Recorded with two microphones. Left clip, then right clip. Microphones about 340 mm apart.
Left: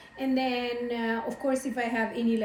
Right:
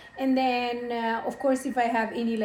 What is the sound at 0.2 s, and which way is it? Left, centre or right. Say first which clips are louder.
A woman's voice: right 4 dB; centre.